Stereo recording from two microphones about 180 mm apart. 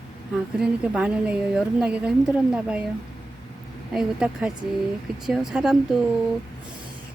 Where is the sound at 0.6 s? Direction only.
5° right (ahead or behind).